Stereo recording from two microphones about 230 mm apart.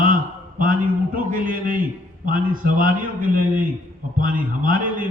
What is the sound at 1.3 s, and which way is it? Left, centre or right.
A man's voice, right.